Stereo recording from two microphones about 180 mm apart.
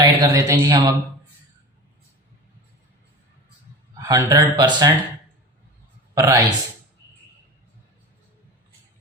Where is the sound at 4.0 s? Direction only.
20° right (ahead or behind).